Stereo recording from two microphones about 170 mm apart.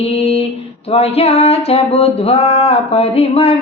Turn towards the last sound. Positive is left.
turn(degrees=35)  # may be behind; listen again after turning